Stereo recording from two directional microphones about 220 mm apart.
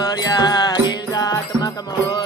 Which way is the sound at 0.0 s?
15° left (ahead or behind).